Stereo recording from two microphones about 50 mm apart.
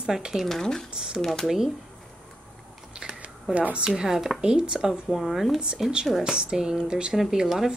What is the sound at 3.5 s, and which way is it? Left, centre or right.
Speech, right.